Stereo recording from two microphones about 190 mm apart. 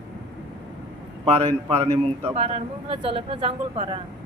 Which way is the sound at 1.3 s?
30° right (ahead or behind).